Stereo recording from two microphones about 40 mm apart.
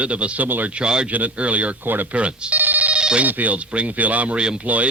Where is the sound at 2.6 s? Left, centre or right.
Right.